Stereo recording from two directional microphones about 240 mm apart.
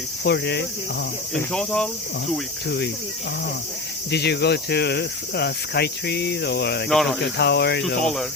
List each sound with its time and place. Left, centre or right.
0.3 s speech: left
1.3 s speech: centre
2.6 s speech: left
4.1 s speech: left
6.8 s speech: centre
7.2 s speech: left
8.0 s speech: centre